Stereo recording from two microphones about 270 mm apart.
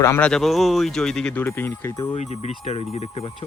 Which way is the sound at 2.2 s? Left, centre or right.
Left.